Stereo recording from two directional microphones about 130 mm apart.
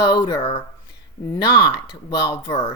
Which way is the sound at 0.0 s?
30° left (ahead or behind).